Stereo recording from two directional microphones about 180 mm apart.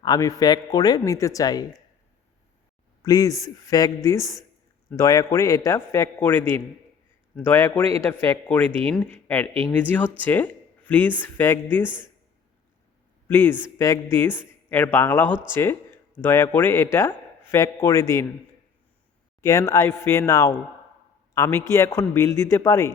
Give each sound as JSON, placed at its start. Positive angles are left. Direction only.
{"t": 0.0, "sound": "speech", "side_deg": 20}
{"t": 3.0, "sound": "a man's voice", "side_deg": 20}
{"t": 13.2, "sound": "speech", "side_deg": 10}
{"t": 19.4, "sound": "speech", "side_deg": 15}